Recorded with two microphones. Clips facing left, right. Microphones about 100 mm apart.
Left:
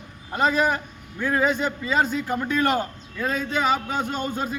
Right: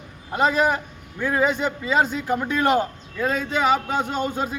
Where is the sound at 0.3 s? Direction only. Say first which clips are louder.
Right 1 dB; 15° right (ahead or behind).